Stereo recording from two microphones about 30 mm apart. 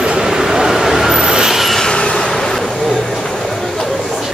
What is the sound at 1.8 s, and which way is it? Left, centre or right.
Train, left.